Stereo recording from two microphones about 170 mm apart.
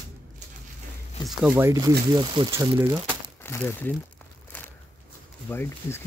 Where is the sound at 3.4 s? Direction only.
15° left (ahead or behind).